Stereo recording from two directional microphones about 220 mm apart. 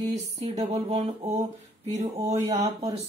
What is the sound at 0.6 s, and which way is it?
Speech, 30° right (ahead or behind).